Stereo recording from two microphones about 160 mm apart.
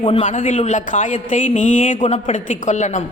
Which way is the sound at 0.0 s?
40° left (ahead or behind).